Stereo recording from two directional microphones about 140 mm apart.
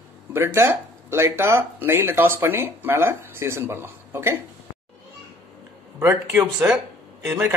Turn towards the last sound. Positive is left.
turn(degrees=-15)  # may be behind; listen again after turning